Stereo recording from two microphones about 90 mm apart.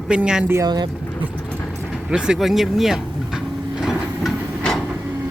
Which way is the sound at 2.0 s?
10° right (ahead or behind).